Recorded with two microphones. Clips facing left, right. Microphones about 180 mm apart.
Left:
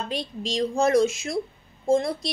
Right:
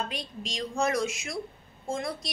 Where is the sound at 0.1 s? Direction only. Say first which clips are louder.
Left 8 dB; 30° left (ahead or behind).